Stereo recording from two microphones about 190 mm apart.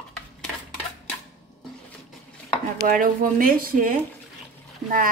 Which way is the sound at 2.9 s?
45° right (ahead or behind).